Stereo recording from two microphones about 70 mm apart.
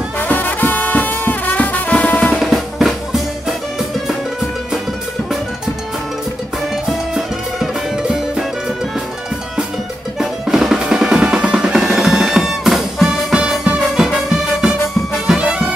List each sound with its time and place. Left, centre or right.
0.2 s music: left
2.3 s drum: centre
10.1 s drum: centre
15.2 s music: centre